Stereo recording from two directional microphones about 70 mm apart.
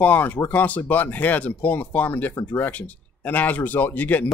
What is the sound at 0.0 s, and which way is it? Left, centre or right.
Speech, left.